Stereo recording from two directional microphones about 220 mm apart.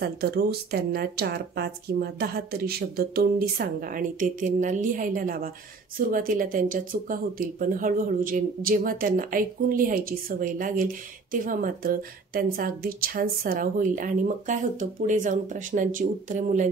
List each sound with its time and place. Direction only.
0.0 s speech: 45° right (ahead or behind)